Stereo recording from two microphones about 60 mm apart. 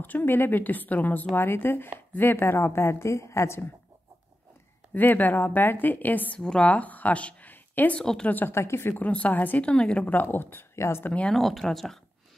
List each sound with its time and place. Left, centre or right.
0.0 s a woman's voice: left
4.9 s speech: left
6.4 s speech: centre
8.0 s speech: centre
8.3 s speech: left
8.5 s a woman's voice: left
8.9 s speech: left
10.2 s a woman's voice: left
11.3 s speech: centre